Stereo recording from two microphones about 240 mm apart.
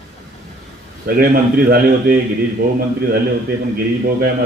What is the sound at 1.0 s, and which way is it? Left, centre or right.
A man's voice, right.